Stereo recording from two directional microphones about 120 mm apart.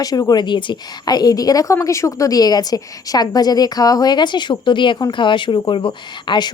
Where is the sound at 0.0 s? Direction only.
30° left (ahead or behind).